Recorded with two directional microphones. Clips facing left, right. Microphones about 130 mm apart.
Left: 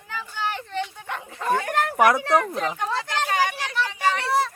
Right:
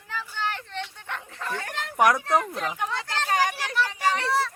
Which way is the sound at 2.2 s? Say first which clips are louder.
Left 3 dB; 70° left (ahead or behind).